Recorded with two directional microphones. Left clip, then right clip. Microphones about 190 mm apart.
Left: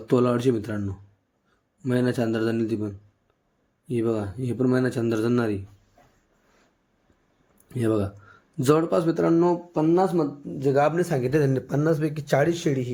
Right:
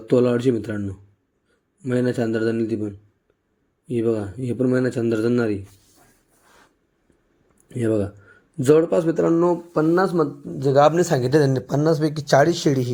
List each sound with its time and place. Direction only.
0.1 s speech: 5° left (ahead or behind)
7.7 s speech: 5° left (ahead or behind)
9.7 s speech: 15° right (ahead or behind)